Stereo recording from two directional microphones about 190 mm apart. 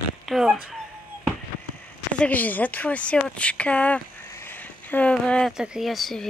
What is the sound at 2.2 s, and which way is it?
Speech, 10° left (ahead or behind).